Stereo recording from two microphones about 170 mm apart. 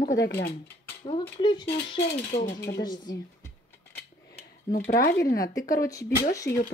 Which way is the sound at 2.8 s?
25° left (ahead or behind).